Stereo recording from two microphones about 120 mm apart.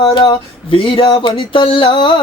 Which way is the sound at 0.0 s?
45° left (ahead or behind).